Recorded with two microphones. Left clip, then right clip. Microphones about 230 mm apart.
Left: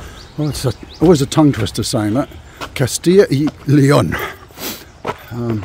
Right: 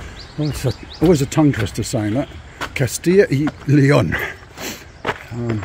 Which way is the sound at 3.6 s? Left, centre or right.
Centre.